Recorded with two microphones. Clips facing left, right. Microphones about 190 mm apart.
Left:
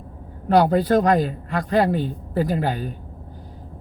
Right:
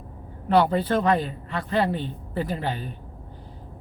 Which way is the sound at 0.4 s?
40° left (ahead or behind).